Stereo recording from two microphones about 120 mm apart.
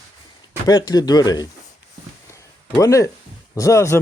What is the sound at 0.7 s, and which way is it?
Speech, 35° left (ahead or behind).